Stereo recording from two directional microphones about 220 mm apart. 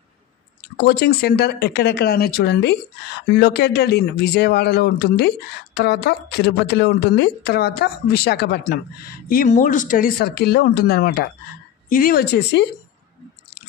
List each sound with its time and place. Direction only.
0.7 s a woman's voice: 45° left (ahead or behind)